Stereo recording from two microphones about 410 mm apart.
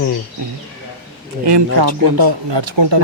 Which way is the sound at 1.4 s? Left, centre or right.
Right.